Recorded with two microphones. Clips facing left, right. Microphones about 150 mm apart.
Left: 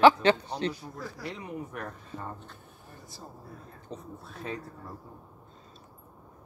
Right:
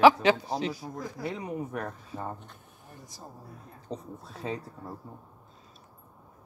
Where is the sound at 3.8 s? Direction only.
30° right (ahead or behind).